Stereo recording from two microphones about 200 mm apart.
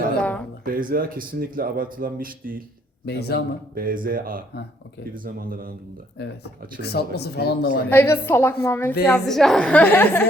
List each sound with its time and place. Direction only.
0.6 s speech: 45° right (ahead or behind)
3.1 s speech: 55° left (ahead or behind)
3.8 s speech: 45° right (ahead or behind)
6.8 s speech: 55° left (ahead or behind)
7.9 s a woman's voice: 10° left (ahead or behind)